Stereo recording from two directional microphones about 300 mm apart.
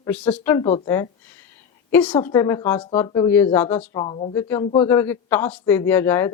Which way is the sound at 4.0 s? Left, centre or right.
Centre.